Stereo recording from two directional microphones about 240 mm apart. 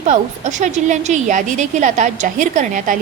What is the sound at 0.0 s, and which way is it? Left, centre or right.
A woman's voice, right.